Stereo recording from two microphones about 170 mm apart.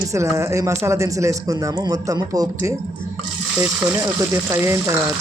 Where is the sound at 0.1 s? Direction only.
15° right (ahead or behind).